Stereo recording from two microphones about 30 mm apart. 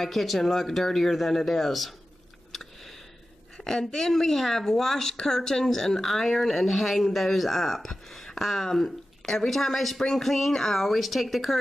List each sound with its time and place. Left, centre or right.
0.0 s speech: centre
2.5 s a sound: centre
3.5 s speech: centre